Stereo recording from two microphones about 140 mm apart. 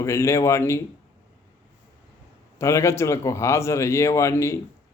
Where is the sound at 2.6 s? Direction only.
20° left (ahead or behind).